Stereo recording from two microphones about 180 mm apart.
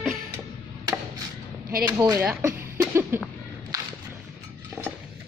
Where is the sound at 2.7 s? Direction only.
15° right (ahead or behind).